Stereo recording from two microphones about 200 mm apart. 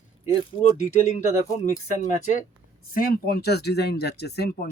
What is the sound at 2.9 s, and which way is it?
Speech, 50° left (ahead or behind).